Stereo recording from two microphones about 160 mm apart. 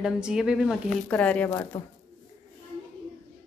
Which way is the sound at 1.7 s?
35° left (ahead or behind).